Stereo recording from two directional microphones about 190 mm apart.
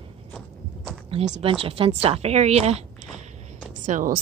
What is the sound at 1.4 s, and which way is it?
A woman's voice, 30° right (ahead or behind).